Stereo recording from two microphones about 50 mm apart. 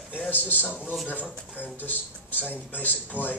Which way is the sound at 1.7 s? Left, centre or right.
Left.